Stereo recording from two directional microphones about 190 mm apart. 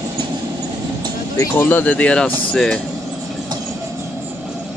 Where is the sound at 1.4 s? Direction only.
10° left (ahead or behind).